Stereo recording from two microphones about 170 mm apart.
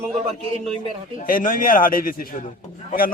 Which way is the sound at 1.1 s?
55° left (ahead or behind).